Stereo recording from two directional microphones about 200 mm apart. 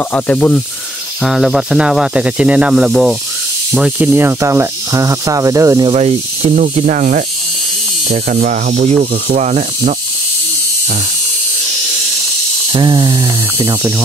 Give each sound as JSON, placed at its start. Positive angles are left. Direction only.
{"t": 0.1, "sound": "speech", "side_deg": 5}
{"t": 5.9, "sound": "speech", "side_deg": -30}
{"t": 12.7, "sound": "a sound", "side_deg": -25}